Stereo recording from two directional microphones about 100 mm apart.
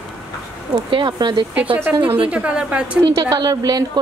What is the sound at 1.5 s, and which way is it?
A woman's voice, 15° right (ahead or behind).